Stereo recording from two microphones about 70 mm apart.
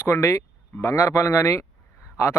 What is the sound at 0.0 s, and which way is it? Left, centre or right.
A man's voice, left.